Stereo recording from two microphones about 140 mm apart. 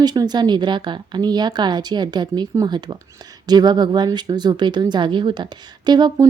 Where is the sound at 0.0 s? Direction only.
30° right (ahead or behind).